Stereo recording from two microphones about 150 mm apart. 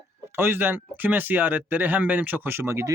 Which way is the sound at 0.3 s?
15° right (ahead or behind).